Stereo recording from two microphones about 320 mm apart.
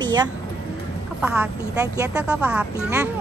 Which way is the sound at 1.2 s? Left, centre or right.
Centre.